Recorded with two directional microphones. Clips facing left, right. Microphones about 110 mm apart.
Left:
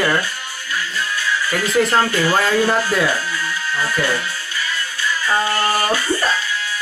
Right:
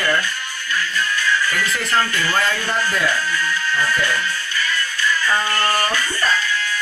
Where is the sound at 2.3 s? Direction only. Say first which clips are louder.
Left 5 dB; 10° left (ahead or behind).